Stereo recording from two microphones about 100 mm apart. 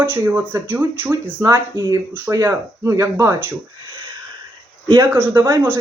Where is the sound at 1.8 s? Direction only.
40° right (ahead or behind).